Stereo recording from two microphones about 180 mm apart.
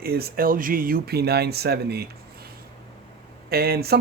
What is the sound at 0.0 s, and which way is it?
Speech, 55° right (ahead or behind).